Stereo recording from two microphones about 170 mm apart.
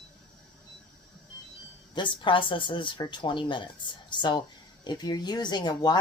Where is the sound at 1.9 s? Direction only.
30° left (ahead or behind).